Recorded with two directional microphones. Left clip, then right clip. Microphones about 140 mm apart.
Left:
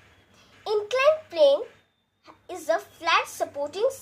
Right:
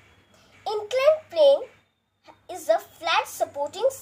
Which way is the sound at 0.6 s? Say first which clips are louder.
Even; 20° left (ahead or behind).